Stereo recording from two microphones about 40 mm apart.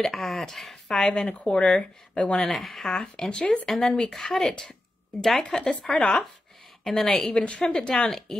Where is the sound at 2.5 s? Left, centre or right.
Centre.